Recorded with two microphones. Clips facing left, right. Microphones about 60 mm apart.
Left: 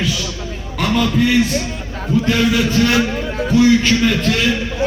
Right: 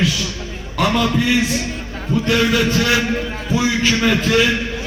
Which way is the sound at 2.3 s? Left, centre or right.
Centre.